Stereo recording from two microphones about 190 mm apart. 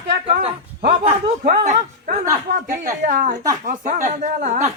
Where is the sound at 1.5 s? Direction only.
40° right (ahead or behind).